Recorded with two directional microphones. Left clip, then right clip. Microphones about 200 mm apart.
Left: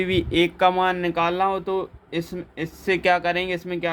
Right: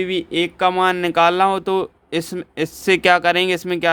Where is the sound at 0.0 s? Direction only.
20° right (ahead or behind).